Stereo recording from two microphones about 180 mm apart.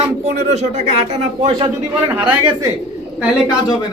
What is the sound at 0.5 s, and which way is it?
Speech, 40° right (ahead or behind).